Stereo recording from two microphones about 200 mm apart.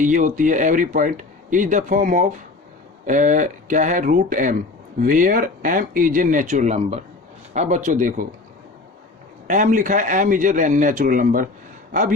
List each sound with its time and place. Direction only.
0.0 s speech: 40° right (ahead or behind)
9.5 s speech: 40° right (ahead or behind)